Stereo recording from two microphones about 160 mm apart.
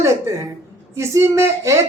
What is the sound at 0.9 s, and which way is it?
Speech, 15° right (ahead or behind).